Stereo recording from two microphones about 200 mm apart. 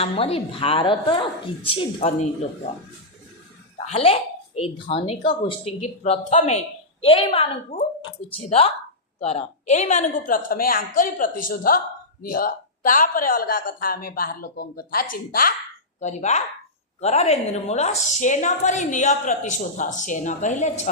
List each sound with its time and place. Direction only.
0.0 s a woman's voice: 30° left (ahead or behind)
3.8 s a woman's voice: 30° left (ahead or behind)